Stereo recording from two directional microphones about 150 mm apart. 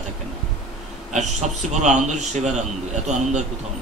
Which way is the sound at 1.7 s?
50° right (ahead or behind).